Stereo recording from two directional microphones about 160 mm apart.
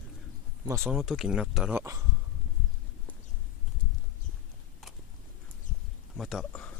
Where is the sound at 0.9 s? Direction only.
Centre (ahead or behind).